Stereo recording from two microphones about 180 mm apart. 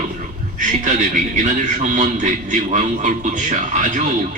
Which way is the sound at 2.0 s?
45° right (ahead or behind).